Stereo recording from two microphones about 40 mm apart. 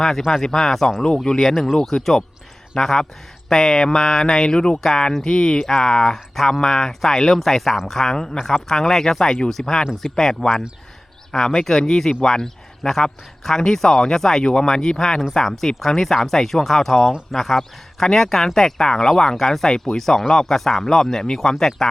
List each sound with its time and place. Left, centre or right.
0.0 s speech: centre
1.0 s speech: centre